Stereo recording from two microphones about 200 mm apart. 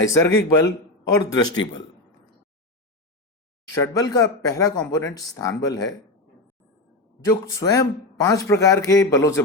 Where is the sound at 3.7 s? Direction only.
15° left (ahead or behind).